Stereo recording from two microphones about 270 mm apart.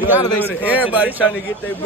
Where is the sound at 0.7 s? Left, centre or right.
Centre.